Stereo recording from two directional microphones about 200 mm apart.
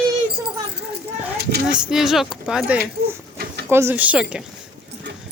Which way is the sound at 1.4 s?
50° right (ahead or behind).